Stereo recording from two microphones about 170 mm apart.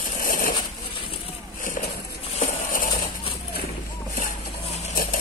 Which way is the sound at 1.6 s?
50° left (ahead or behind).